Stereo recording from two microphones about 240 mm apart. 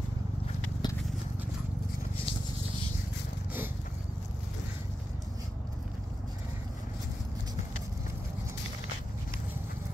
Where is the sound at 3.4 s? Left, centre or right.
Centre.